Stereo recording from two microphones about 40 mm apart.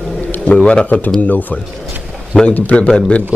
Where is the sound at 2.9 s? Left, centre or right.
Left.